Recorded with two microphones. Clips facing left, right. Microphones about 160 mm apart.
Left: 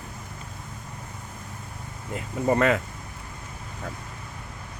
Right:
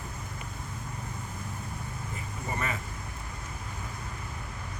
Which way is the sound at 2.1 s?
90° left.